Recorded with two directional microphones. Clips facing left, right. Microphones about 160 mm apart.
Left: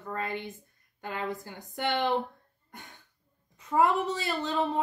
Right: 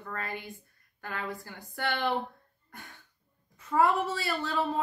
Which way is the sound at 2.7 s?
20° left (ahead or behind).